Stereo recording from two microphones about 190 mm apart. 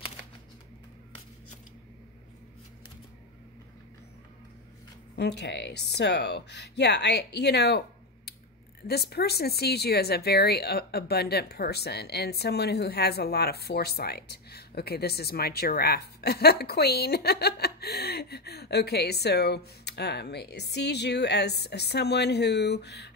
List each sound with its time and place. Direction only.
5.1 s speech: 60° left (ahead or behind)
8.8 s speech: 55° left (ahead or behind)